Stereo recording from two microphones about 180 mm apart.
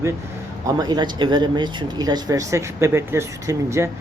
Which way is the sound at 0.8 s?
25° right (ahead or behind).